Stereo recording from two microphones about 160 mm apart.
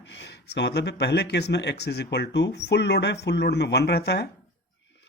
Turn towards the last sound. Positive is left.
turn(degrees=90)